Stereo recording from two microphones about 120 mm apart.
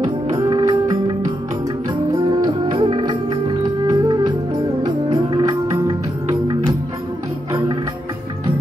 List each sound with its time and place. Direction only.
0.0 s music: 35° right (ahead or behind)
2.1 s music: 35° right (ahead or behind)